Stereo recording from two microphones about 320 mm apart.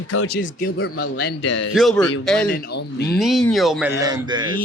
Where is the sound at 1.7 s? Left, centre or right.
Centre.